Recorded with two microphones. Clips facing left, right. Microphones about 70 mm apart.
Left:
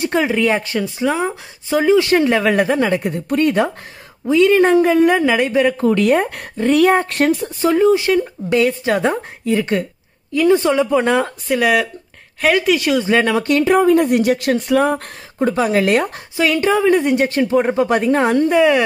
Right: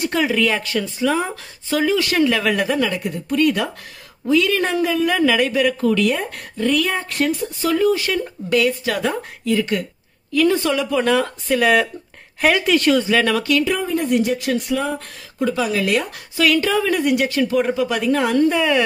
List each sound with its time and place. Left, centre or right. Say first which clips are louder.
0.0 s speech: left 2 dB; left
6.6 s speech: left 7 dB; left
7.4 s speech: left 3 dB; left
10.3 s speech: left 4 dB; left
11.4 s speech: right 1 dB; centre
13.0 s speech: left 2 dB; left
13.4 s speech: left 4 dB; left
13.7 s speech: left 7 dB; left
15.3 s speech: left 4 dB; left
16.3 s speech: left 2 dB; left